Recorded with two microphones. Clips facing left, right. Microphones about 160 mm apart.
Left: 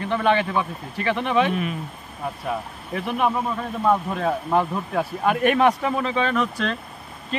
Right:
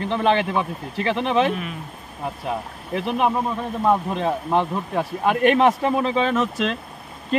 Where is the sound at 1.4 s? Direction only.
Centre (ahead or behind).